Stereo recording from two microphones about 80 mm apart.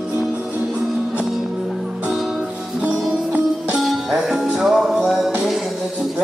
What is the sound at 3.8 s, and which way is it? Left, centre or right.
Music, centre.